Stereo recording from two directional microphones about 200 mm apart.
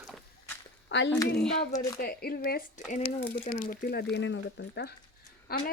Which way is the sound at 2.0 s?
45° left (ahead or behind).